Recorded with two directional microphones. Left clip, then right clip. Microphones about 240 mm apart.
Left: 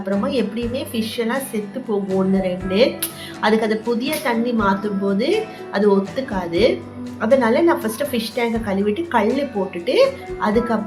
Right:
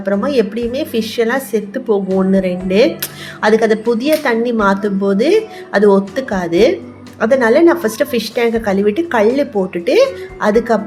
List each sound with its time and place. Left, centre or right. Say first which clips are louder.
0.1 s a woman's voice: right 7 dB; right